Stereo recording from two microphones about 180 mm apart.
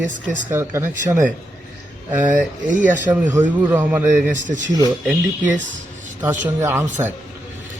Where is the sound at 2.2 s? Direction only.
45° right (ahead or behind).